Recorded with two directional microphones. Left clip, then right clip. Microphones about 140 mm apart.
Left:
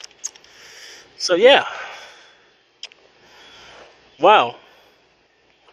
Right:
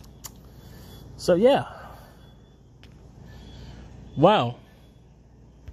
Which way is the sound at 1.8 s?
40° left (ahead or behind).